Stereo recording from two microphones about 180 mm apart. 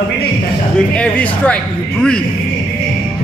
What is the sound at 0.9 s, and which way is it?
Speech, 5° left (ahead or behind).